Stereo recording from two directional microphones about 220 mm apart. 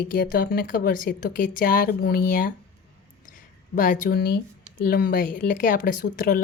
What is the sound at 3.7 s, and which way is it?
Speech, 40° left (ahead or behind).